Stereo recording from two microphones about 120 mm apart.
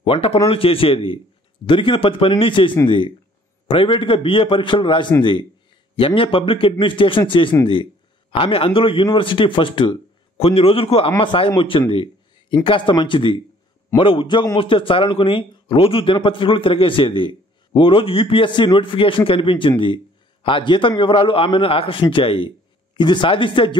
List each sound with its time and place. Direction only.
0.0 s a man's voice: 50° left (ahead or behind)
10.3 s a man's voice: 55° left (ahead or behind)
11.9 s a sound: 45° left (ahead or behind)
12.6 s a man's voice: 45° left (ahead or behind)